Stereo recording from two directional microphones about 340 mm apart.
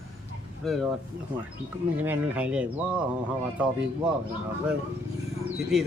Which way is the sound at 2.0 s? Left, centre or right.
Centre.